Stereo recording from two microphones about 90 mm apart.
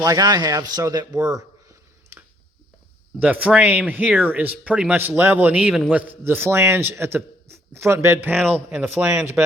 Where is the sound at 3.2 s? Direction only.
15° right (ahead or behind).